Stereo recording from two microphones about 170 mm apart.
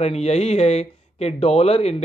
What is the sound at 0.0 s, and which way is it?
A man's voice, 40° left (ahead or behind).